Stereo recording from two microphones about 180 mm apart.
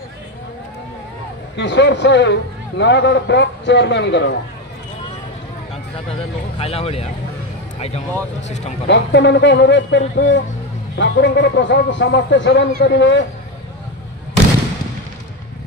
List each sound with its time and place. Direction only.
1.6 s a man's voice: 75° left (ahead or behind)
6.6 s speech: 35° left (ahead or behind)
8.8 s a man's voice: 75° left (ahead or behind)
11.0 s a man's voice: 80° left